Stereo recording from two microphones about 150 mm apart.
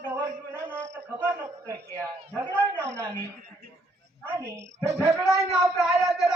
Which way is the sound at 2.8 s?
20° right (ahead or behind).